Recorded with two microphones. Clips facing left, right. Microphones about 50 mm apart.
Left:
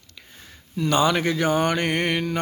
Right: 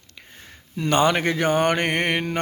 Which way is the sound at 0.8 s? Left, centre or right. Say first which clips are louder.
Right 1 dB; right.